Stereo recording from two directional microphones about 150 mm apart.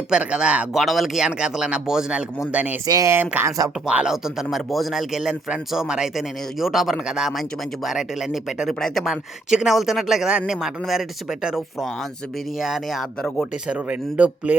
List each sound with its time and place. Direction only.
0.1 s speech: 5° right (ahead or behind)
2.8 s speech: 25° right (ahead or behind)
3.8 s speech: 5° right (ahead or behind)